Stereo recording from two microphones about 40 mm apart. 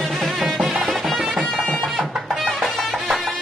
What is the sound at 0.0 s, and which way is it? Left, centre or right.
Music, centre.